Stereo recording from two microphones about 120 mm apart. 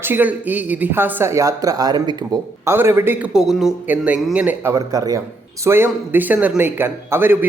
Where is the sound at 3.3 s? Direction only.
5° right (ahead or behind).